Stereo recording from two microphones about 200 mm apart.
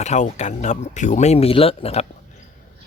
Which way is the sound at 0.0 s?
35° left (ahead or behind).